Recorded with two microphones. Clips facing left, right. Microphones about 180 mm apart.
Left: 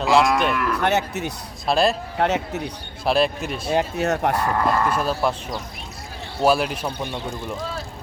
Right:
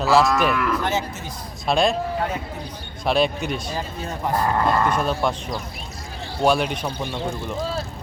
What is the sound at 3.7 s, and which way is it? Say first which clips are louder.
Speech: left 8 dB; 75° left (ahead or behind).